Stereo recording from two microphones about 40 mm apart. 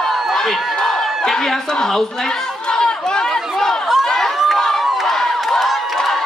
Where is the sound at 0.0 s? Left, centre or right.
Centre.